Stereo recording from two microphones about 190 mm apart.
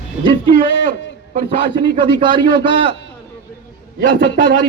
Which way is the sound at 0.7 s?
75° left (ahead or behind).